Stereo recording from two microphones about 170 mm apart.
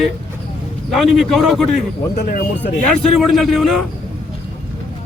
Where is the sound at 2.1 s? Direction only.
55° left (ahead or behind).